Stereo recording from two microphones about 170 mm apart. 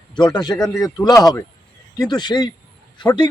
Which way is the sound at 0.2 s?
25° left (ahead or behind).